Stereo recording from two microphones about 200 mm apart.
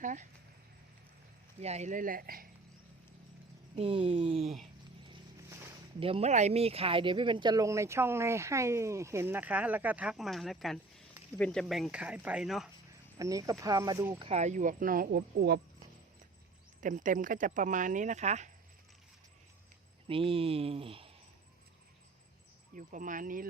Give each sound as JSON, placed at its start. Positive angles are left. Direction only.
{"t": 0.0, "sound": "speech", "side_deg": -40}
{"t": 1.6, "sound": "speech", "side_deg": -35}
{"t": 3.8, "sound": "speech", "side_deg": -25}
{"t": 6.0, "sound": "speech", "side_deg": -30}
{"t": 13.1, "sound": "speech", "side_deg": -15}
{"t": 16.8, "sound": "speech", "side_deg": -40}
{"t": 20.1, "sound": "speech", "side_deg": -25}
{"t": 22.7, "sound": "speech", "side_deg": -40}